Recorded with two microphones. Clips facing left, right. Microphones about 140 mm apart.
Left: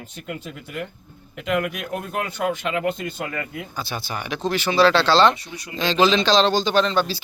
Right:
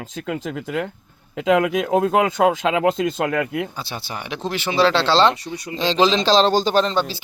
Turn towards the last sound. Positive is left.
turn(degrees=-15)  # may be behind; listen again after turning